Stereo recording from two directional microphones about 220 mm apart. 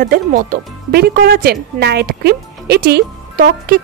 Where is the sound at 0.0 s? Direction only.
40° right (ahead or behind).